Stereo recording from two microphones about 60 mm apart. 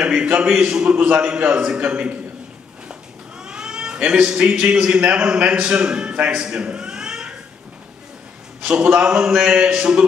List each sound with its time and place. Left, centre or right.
0.0 s a man's voice: centre
8.6 s speech: centre